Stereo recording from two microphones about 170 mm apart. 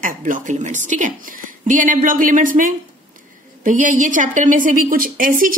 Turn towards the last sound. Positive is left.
turn(degrees=-55)  # may be behind; listen again after turning